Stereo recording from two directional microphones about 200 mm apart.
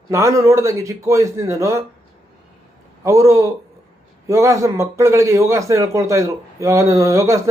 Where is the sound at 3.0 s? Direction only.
15° right (ahead or behind).